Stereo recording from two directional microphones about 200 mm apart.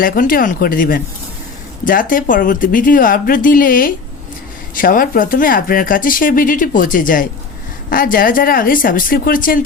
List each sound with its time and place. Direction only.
0.0 s speech: 45° left (ahead or behind)